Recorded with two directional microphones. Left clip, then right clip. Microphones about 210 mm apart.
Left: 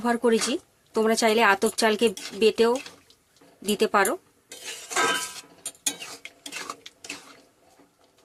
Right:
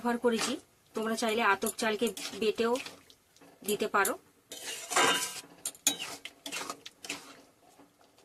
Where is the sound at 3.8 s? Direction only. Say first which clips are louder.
Left 8 dB; 55° left (ahead or behind).